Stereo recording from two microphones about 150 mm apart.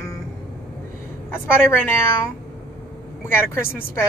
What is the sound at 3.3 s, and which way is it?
Speech, 15° left (ahead or behind).